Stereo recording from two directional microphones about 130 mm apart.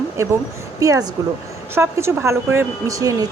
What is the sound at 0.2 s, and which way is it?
A woman's voice, 25° right (ahead or behind).